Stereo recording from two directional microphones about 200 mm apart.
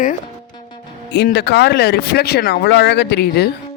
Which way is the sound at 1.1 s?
60° left (ahead or behind).